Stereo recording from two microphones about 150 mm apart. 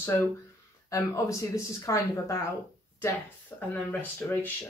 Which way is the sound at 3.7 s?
10° left (ahead or behind).